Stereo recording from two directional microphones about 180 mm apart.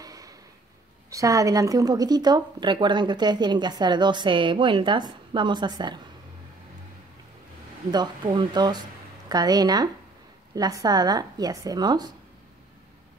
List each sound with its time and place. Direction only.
0.0 s a sound: 20° right (ahead or behind)
1.1 s speech: 20° right (ahead or behind)
7.9 s speech: 25° right (ahead or behind)